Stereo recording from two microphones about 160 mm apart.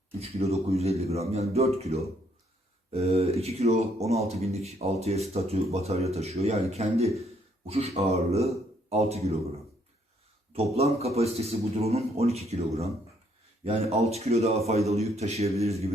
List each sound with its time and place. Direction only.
0.2 s speech: 40° right (ahead or behind)
10.5 s speech: 40° right (ahead or behind)